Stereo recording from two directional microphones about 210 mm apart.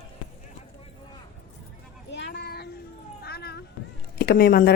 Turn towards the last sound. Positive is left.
turn(degrees=50)  # may be behind; listen again after turning